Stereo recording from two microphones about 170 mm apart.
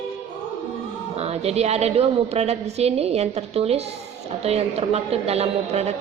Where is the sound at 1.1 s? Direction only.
40° right (ahead or behind).